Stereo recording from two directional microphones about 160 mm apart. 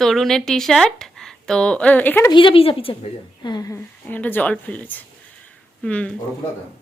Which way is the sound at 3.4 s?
25° left (ahead or behind).